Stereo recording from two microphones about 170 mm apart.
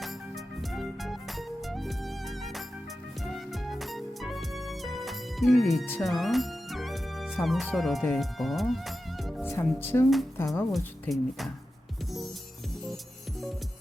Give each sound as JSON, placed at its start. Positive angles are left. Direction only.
{"t": 0.0, "sound": "music", "side_deg": 0}
{"t": 6.0, "sound": "speech", "side_deg": 0}
{"t": 9.4, "sound": "music", "side_deg": 15}
{"t": 9.7, "sound": "speech", "side_deg": 15}
{"t": 11.1, "sound": "speech", "side_deg": 0}